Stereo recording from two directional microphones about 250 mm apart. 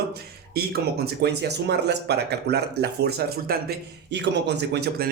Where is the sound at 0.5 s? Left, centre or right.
Right.